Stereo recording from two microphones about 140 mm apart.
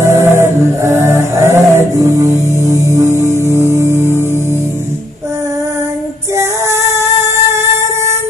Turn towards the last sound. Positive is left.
turn(degrees=-20)  # may be behind; listen again after turning